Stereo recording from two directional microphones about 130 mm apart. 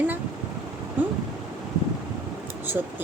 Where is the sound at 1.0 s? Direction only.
15° right (ahead or behind).